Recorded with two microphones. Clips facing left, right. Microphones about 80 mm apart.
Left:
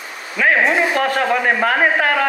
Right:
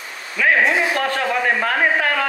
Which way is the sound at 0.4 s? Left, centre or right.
Left.